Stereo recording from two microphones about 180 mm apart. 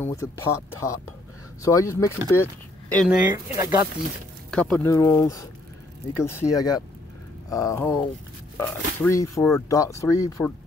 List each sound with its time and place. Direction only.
0.0 s speech: 15° left (ahead or behind)
3.1 s speech: 10° right (ahead or behind)
4.5 s speech: 5° left (ahead or behind)